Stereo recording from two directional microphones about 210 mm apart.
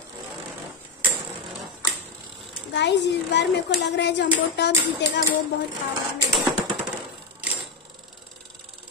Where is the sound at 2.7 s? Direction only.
55° left (ahead or behind).